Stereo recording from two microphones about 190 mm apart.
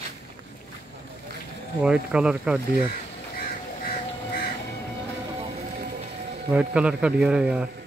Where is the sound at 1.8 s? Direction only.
5° right (ahead or behind).